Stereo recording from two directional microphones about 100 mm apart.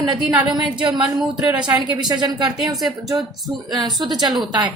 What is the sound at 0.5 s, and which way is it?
Speech, 50° right (ahead or behind).